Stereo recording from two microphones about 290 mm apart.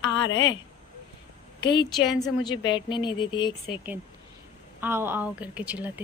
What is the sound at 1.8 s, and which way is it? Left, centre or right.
Speech, centre.